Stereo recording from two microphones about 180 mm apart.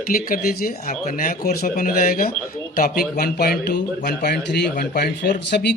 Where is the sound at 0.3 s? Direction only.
55° left (ahead or behind).